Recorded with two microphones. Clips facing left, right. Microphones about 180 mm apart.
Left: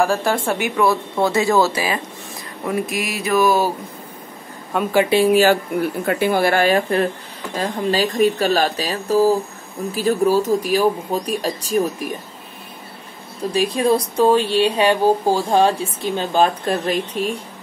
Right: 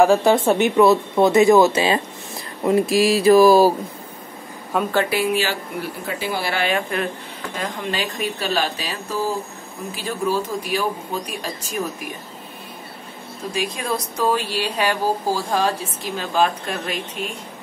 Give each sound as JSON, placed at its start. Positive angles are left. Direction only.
{"t": 0.2, "sound": "speech", "side_deg": -20}
{"t": 2.6, "sound": "a sound", "side_deg": -30}
{"t": 4.7, "sound": "speech", "side_deg": 0}
{"t": 5.3, "sound": "speech", "side_deg": 45}
{"t": 6.0, "sound": "speech", "side_deg": 55}
{"t": 13.5, "sound": "speech", "side_deg": 35}